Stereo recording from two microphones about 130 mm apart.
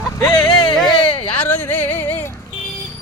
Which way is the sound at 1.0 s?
40° left (ahead or behind).